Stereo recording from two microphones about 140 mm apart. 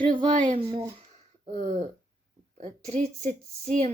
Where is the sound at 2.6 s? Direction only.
50° right (ahead or behind).